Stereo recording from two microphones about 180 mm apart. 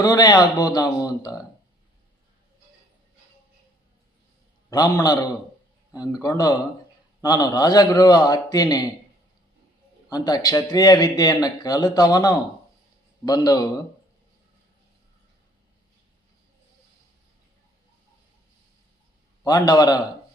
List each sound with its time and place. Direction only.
0.0 s a man's voice: 20° left (ahead or behind)
4.7 s a man's voice: 20° left (ahead or behind)
10.1 s a man's voice: 20° left (ahead or behind)
19.5 s a man's voice: 20° left (ahead or behind)